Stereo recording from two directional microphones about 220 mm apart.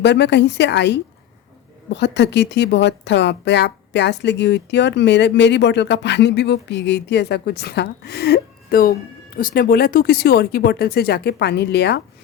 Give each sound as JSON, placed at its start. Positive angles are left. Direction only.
{"t": 0.0, "sound": "speech", "side_deg": 50}